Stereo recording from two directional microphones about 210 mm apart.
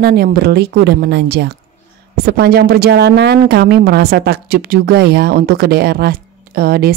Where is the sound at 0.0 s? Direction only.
50° right (ahead or behind).